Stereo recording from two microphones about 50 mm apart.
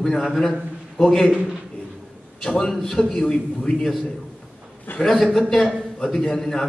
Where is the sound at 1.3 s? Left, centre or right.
Right.